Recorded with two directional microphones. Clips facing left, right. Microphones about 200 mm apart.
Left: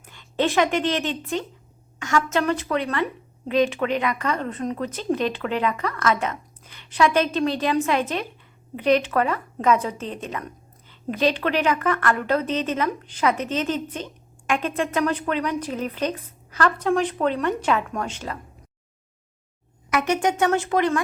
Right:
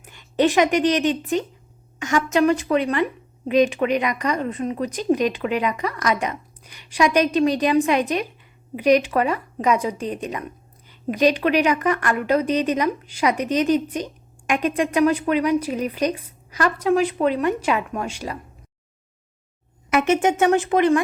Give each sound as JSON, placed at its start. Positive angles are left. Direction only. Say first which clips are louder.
{"t": 0.0, "sound": "a woman's voice", "louder": "right 4 dB", "side_deg": -15}
{"t": 19.9, "sound": "speech", "louder": "right 4 dB", "side_deg": -25}